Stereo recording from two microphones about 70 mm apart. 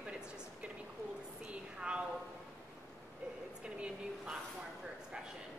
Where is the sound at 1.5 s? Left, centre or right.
Centre.